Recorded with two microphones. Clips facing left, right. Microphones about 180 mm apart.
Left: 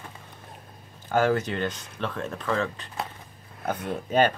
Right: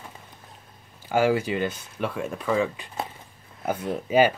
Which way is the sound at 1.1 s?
10° right (ahead or behind).